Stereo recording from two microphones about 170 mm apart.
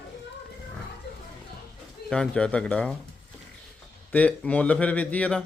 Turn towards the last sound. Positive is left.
turn(degrees=5)  # may be behind; listen again after turning